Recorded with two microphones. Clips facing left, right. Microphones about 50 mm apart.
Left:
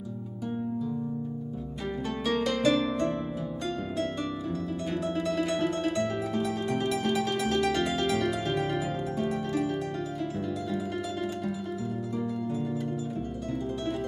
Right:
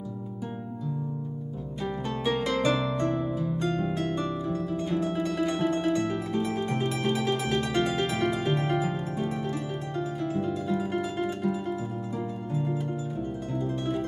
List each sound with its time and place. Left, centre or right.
2.2 s harp: centre
5.2 s music: centre
7.0 s music: right